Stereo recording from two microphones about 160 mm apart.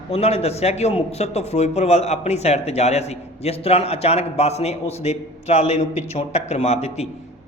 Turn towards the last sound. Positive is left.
turn(degrees=40)  # may be behind; listen again after turning